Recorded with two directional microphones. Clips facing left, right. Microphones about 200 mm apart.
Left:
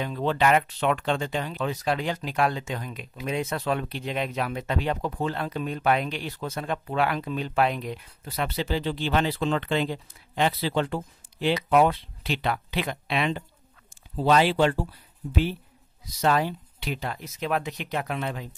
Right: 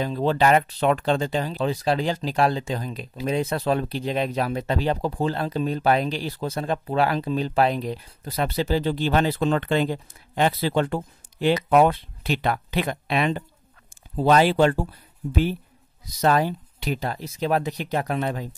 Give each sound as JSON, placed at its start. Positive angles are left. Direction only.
{"t": 0.0, "sound": "speech", "side_deg": -35}